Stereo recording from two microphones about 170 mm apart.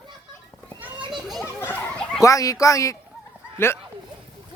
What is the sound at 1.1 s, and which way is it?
Children playing, centre (ahead or behind).